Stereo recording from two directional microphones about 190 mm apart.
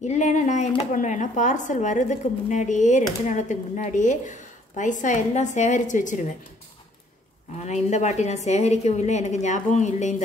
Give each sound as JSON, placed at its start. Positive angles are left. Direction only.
{"t": 0.0, "sound": "a woman's voice", "side_deg": 40}
{"t": 7.6, "sound": "a woman's voice", "side_deg": 35}